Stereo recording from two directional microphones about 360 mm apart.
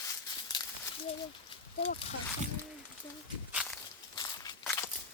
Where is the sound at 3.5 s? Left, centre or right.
Centre.